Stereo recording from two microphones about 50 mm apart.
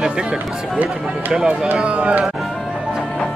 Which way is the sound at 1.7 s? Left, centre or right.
Right.